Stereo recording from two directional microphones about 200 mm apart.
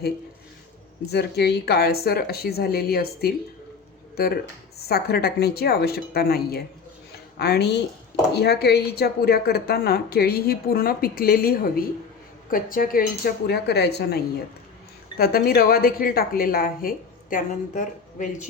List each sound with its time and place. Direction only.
1.1 s a woman's voice: 55° left (ahead or behind)
4.8 s a woman's voice: 50° left (ahead or behind)
7.1 s a sound: 55° left (ahead or behind)
8.3 s a woman's voice: 55° left (ahead or behind)
15.2 s a woman's voice: 50° left (ahead or behind)